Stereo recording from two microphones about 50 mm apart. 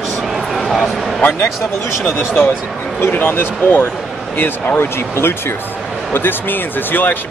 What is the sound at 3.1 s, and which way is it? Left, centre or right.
Speech, left.